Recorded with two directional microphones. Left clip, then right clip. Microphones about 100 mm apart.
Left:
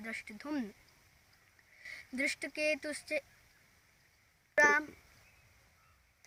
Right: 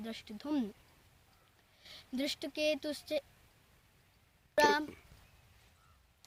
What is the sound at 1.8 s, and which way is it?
Speech, 30° right (ahead or behind).